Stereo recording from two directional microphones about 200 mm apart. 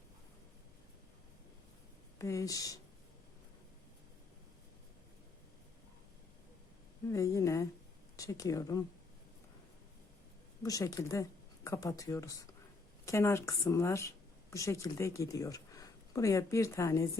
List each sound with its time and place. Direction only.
2.1 s a woman's voice: 15° left (ahead or behind)
7.1 s a woman's voice: 15° left (ahead or behind)
10.6 s a woman's voice: 15° left (ahead or behind)